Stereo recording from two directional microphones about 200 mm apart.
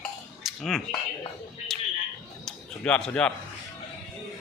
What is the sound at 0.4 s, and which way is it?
Speech, centre (ahead or behind).